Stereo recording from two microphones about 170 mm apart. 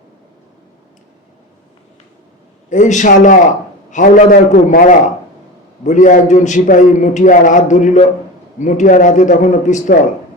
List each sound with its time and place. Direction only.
2.6 s a man's voice: 45° left (ahead or behind)